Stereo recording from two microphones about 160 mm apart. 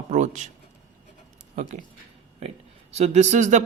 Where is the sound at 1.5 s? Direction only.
50° right (ahead or behind).